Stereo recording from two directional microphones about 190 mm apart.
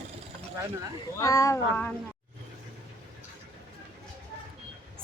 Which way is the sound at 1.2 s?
15° left (ahead or behind).